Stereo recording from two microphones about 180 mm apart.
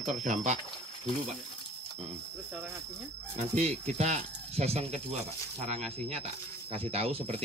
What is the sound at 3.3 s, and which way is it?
Speech, 40° right (ahead or behind).